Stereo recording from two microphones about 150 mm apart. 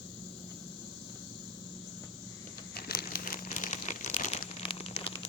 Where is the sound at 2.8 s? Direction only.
85° left; by 4.4 s 50° left (ahead or behind).